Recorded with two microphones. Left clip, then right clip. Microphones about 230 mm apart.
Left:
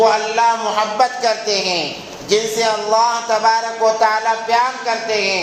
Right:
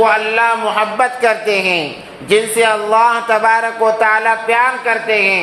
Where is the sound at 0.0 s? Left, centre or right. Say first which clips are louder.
Right 2 dB; right.